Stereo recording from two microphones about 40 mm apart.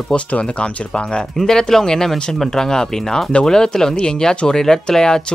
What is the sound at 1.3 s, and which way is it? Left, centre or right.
Speech, centre.